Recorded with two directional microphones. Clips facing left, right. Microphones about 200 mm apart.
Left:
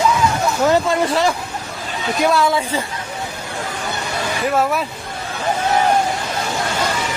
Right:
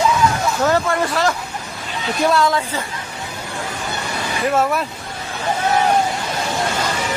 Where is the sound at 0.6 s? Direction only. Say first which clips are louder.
Left 2 dB; 15° left (ahead or behind).